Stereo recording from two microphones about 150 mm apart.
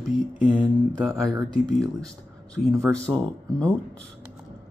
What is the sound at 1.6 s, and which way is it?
Speech, centre (ahead or behind).